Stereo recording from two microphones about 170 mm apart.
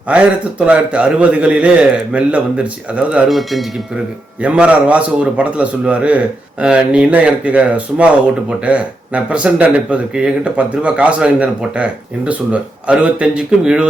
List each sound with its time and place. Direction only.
0.1 s a man's voice: 5° right (ahead or behind)